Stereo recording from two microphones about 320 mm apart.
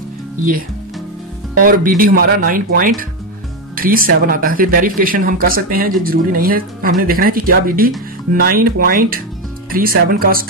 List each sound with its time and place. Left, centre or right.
1.6 s speech: right